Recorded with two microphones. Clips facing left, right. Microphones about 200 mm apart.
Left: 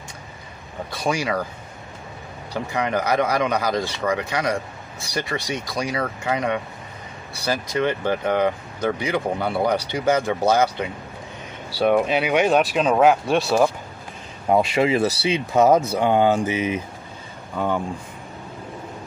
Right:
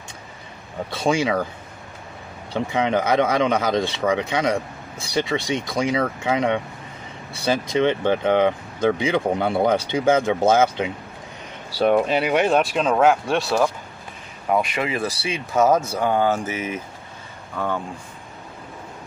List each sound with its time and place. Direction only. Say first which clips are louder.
0.9 s speech: right 3 dB; 25° right (ahead or behind)
2.5 s speech: right 3 dB; 20° right (ahead or behind)
11.8 s speech: even; 10° left (ahead or behind)
14.5 s speech: left 4 dB; 25° left (ahead or behind)